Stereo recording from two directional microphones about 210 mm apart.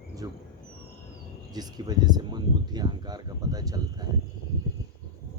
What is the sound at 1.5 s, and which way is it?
Speech, 20° right (ahead or behind).